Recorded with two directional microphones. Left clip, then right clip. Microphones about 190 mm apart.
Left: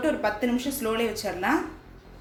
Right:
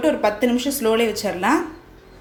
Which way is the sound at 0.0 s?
30° right (ahead or behind).